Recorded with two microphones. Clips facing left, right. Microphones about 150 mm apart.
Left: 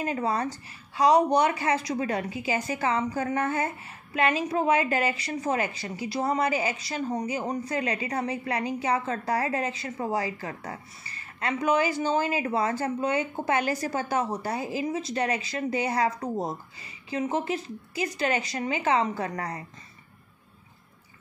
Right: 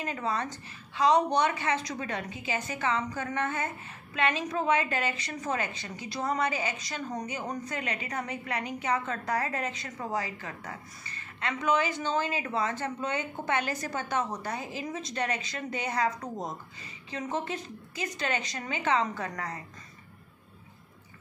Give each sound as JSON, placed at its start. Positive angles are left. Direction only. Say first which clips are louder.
{"t": 0.0, "sound": "a woman's voice", "louder": "left 5 dB", "side_deg": 35}